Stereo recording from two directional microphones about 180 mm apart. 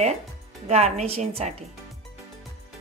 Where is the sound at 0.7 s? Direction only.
35° right (ahead or behind).